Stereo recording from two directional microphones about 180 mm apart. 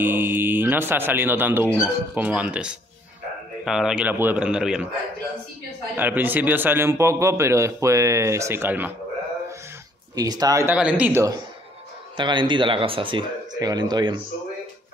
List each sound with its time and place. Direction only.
0.0 s a man's voice: 10° right (ahead or behind)
5.9 s a man's voice: 10° right (ahead or behind)
10.1 s a man's voice: 20° right (ahead or behind)
12.2 s speech: 25° right (ahead or behind)